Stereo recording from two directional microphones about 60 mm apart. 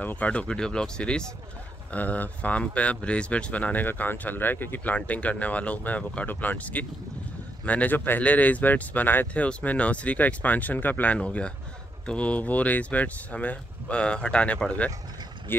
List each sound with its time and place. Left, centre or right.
0.0 s speech: left
1.9 s speech: left
9.3 s speech: left
11.1 s speech: centre